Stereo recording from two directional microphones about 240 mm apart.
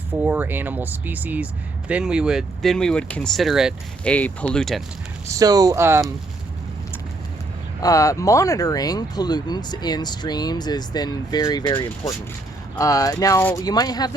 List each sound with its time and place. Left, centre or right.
0.1 s speech: centre
5.3 s speech: centre
7.8 s speech: centre